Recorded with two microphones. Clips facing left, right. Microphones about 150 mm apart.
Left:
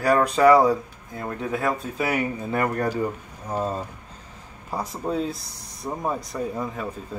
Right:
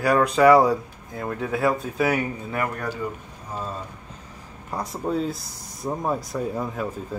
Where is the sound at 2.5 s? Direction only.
40° left (ahead or behind).